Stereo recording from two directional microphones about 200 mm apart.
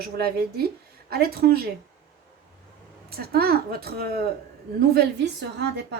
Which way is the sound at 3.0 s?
50° right (ahead or behind).